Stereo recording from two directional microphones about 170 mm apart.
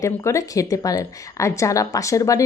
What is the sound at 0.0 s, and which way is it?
Speech, 20° left (ahead or behind).